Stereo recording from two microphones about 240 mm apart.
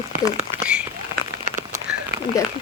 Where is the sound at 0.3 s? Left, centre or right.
Centre.